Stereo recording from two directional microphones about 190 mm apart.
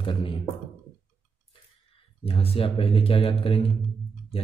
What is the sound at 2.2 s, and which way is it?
Speech, 30° left (ahead or behind).